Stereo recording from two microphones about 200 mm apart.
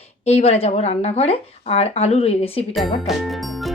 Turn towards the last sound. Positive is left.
turn(degrees=0)  # may be behind; listen again after turning